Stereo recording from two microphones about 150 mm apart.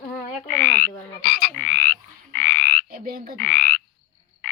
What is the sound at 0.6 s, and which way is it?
Croak, 90° left.